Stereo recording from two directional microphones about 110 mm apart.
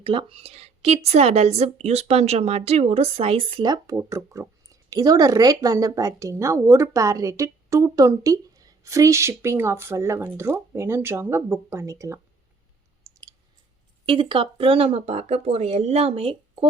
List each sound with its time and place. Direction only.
0.0 s a woman's voice: 50° right (ahead or behind)
3.6 s speech: 40° right (ahead or behind)
3.9 s speech: 30° right (ahead or behind)
13.1 s clicking: 30° right (ahead or behind)
14.0 s speech: 50° right (ahead or behind)